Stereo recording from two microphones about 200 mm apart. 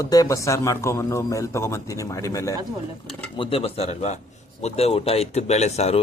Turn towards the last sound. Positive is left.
turn(degrees=30)  # may be behind; listen again after turning